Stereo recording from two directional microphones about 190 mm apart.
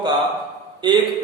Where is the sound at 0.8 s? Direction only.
25° right (ahead or behind).